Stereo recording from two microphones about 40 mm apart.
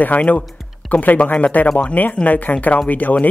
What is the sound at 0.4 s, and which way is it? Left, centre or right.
Music, left.